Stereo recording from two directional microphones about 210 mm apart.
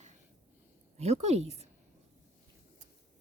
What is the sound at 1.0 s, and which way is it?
Speech, 30° right (ahead or behind).